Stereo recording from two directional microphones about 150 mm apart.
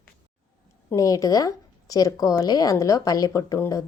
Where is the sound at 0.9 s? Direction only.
25° left (ahead or behind).